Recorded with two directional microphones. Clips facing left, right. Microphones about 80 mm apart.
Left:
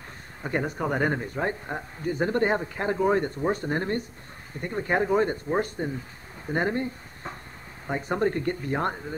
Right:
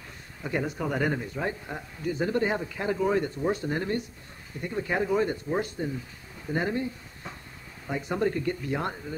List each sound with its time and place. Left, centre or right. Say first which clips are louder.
0.4 s speech: left 2 dB; left